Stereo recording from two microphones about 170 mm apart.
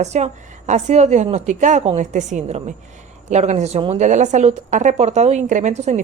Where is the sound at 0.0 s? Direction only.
40° right (ahead or behind).